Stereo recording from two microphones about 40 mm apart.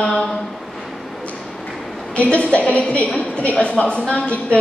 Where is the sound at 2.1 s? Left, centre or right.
Left.